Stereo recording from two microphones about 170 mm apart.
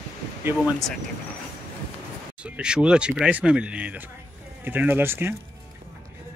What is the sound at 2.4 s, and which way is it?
Speech, 5° right (ahead or behind).